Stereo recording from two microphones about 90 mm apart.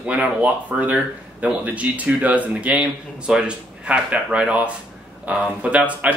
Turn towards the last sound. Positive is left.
turn(degrees=-15)  # may be behind; listen again after turning